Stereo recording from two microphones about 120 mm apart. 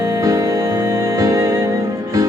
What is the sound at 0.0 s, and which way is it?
Music, 25° right (ahead or behind).